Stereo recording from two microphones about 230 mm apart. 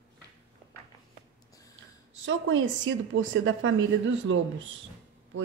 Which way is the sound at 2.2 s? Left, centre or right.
Right.